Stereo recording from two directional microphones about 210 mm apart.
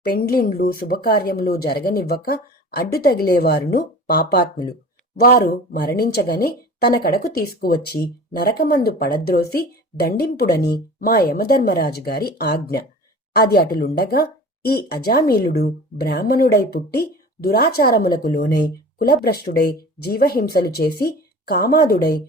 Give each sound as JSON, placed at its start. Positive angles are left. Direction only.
{"t": 0.1, "sound": "a woman's voice", "side_deg": 45}